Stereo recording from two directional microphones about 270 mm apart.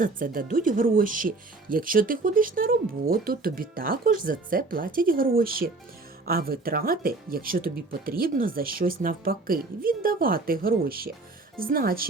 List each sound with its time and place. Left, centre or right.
0.0 s speech: right